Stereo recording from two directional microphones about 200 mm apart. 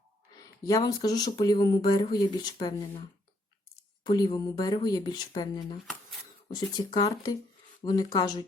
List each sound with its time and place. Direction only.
0.3 s speech: 20° left (ahead or behind)
4.0 s speech: 20° left (ahead or behind)